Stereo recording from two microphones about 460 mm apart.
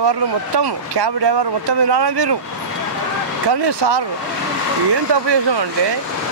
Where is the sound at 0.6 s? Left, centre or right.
Right.